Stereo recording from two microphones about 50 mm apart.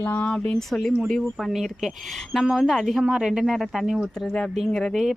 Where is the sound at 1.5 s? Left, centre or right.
Centre.